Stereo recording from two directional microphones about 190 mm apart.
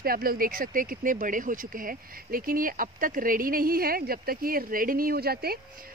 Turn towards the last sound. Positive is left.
turn(degrees=-55)  # may be behind; listen again after turning